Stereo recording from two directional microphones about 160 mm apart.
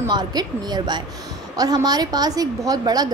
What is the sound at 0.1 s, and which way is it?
A woman's voice, 25° right (ahead or behind).